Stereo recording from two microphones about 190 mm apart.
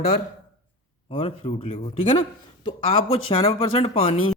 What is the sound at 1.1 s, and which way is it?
A man's voice, 30° left (ahead or behind).